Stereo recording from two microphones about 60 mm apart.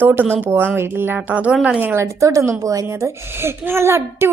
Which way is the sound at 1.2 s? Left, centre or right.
Right.